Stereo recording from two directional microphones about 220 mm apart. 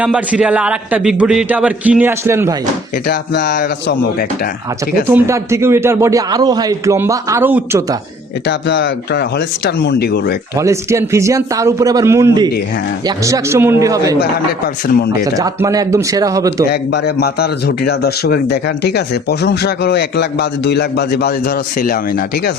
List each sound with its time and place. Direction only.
0.0 s a man's voice: 5° right (ahead or behind)
3.1 s a man's voice: 50° left (ahead or behind)
5.0 s a man's voice: 10° right (ahead or behind)
8.4 s a man's voice: 55° left (ahead or behind)
10.6 s a man's voice: 15° right (ahead or behind)
14.8 s a man's voice: 45° left (ahead or behind)
15.2 s a man's voice: 15° right (ahead or behind)
16.9 s a man's voice: 45° left (ahead or behind)